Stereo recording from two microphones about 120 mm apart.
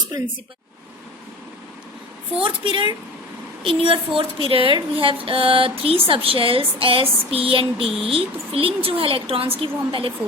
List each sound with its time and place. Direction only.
2.3 s a woman's voice: 45° right (ahead or behind)